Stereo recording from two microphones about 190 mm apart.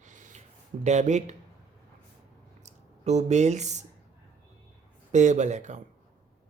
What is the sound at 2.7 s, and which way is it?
Speech, 35° right (ahead or behind).